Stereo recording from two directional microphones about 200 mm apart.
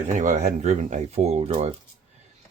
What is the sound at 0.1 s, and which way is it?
Speech, 40° right (ahead or behind).